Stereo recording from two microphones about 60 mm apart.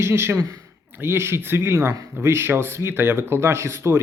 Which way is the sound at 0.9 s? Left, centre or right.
Right.